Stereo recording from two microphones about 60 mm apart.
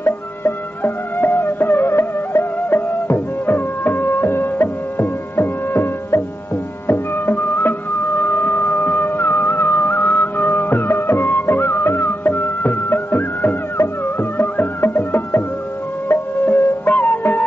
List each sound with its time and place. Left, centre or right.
0.0 s music: left
16.4 s music: left